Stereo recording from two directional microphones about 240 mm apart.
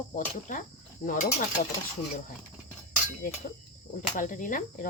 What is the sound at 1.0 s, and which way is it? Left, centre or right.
Speech, left.